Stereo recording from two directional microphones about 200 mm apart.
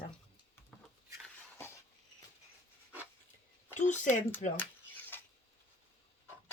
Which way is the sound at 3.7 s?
35° left (ahead or behind).